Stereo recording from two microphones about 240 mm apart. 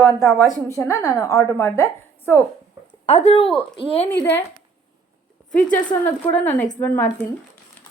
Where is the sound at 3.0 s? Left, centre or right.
Left.